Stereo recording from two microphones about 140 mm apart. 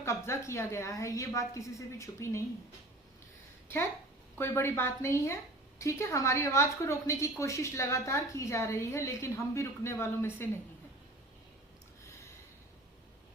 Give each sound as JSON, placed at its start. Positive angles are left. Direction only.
{"t": 0.0, "sound": "a woman's voice", "side_deg": 20}
{"t": 4.4, "sound": "a woman's voice", "side_deg": 15}